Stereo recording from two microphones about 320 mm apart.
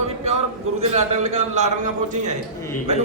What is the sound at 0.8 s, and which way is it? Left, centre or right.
A man's voice, right.